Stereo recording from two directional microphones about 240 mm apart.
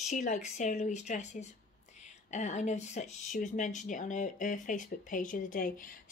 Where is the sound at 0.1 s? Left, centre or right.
Left.